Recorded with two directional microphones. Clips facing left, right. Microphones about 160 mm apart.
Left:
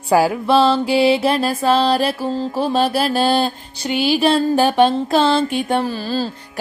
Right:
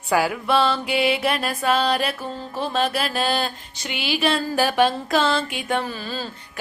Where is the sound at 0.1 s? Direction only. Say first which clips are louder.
Left 6 dB; 30° left (ahead or behind).